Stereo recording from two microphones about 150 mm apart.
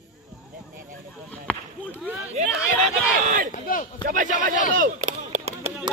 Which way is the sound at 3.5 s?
60° left (ahead or behind).